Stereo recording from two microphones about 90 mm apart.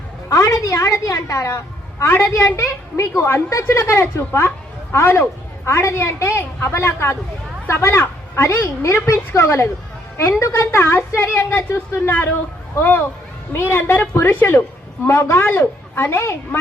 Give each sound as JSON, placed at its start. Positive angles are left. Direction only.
{"t": 0.3, "sound": "a woman's voice", "side_deg": 35}